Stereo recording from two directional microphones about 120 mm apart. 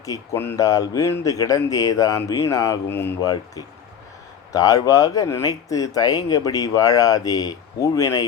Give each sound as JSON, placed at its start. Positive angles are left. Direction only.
{"t": 0.0, "sound": "speech", "side_deg": 25}
{"t": 3.2, "sound": "speech", "side_deg": 30}